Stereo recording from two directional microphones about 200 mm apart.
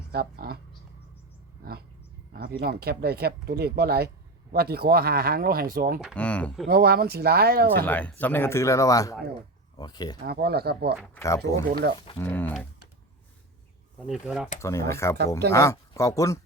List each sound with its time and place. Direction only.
0.1 s speech: 50° right (ahead or behind)
2.3 s speech: 50° right (ahead or behind)
6.1 s speech: 5° left (ahead or behind)
6.7 s speech: 50° right (ahead or behind)
7.9 s speech: 10° left (ahead or behind)
10.2 s speech: 50° right (ahead or behind)
11.1 s speech: 15° left (ahead or behind)
11.8 s speech: 55° right (ahead or behind)
12.2 s speech: 10° left (ahead or behind)
14.1 s speech: 5° right (ahead or behind)
14.6 s speech: 15° left (ahead or behind)